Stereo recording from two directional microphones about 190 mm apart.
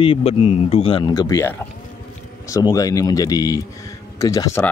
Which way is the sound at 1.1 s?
15° left (ahead or behind).